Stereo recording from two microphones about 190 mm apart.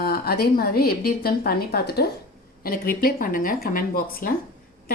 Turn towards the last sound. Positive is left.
turn(degrees=50)  # may be behind; listen again after turning